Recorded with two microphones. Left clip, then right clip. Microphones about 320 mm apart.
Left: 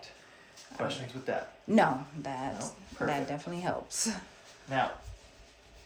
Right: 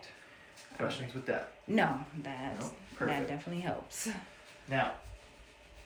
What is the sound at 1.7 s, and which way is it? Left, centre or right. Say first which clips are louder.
Speech: left 5 dB; centre.